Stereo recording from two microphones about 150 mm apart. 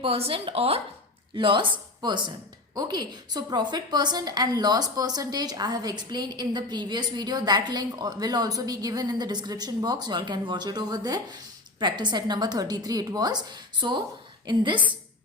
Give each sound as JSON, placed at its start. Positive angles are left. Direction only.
{"t": 0.0, "sound": "a woman's voice", "side_deg": -40}